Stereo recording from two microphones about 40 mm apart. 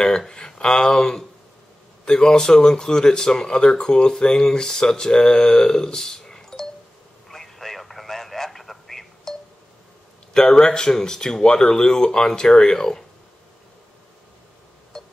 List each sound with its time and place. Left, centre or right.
0.3 s speech: centre
7.2 s a sound: centre
10.3 s speech: centre
14.9 s music: centre